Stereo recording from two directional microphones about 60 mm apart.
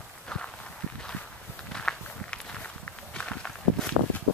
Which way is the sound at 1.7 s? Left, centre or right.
Centre.